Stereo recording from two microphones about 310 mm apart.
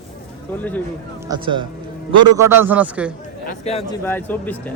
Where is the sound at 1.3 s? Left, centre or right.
Centre.